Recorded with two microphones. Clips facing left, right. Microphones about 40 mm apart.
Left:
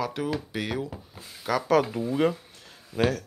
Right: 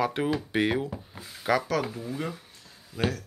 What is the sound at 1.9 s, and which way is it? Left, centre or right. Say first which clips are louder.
Speech: left 9 dB; left.